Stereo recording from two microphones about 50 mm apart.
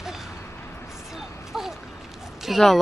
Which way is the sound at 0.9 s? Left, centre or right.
Centre.